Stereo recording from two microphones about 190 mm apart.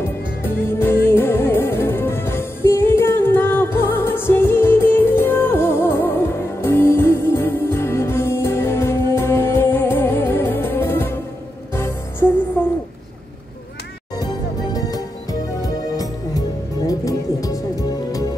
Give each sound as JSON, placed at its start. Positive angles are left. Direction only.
{"t": 0.0, "sound": "music", "side_deg": 10}
{"t": 14.1, "sound": "music", "side_deg": 20}